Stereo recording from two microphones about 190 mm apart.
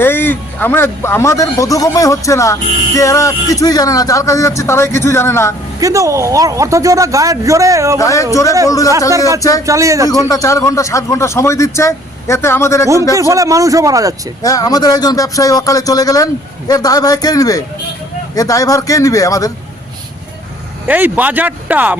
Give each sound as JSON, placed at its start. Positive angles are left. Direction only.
{"t": 0.0, "sound": "speech", "side_deg": 10}
{"t": 5.8, "sound": "a man's voice", "side_deg": -15}
{"t": 7.9, "sound": "speech", "side_deg": 15}
{"t": 9.6, "sound": "a man's voice", "side_deg": -15}
{"t": 10.1, "sound": "speech", "side_deg": 20}
{"t": 13.1, "sound": "a man's voice", "side_deg": -15}
{"t": 14.4, "sound": "speech", "side_deg": 20}
{"t": 20.8, "sound": "a man's voice", "side_deg": -10}